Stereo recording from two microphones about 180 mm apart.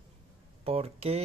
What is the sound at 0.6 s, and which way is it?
Speech, 35° right (ahead or behind).